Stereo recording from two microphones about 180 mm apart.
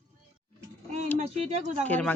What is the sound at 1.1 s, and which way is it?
Speech, 35° right (ahead or behind).